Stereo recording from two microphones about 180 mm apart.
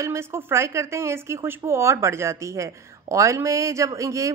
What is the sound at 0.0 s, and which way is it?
Speech, 15° right (ahead or behind).